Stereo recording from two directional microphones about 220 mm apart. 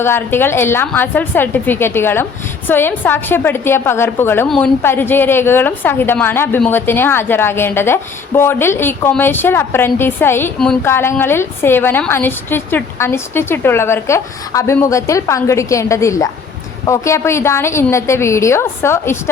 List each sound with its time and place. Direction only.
0.0 s a woman's voice: 10° left (ahead or behind)